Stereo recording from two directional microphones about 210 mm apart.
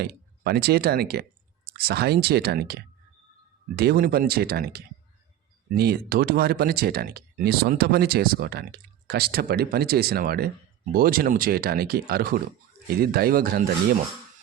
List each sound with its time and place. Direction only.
0.0 s speech: 50° right (ahead or behind)